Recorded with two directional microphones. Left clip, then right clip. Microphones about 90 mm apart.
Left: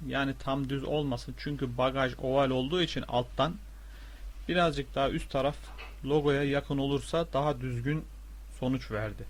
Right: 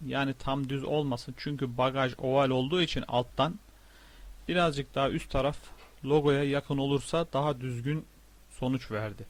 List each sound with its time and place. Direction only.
0.1 s speech: 30° right (ahead or behind)